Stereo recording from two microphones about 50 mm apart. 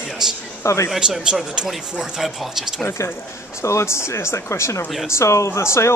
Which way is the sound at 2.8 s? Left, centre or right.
Left.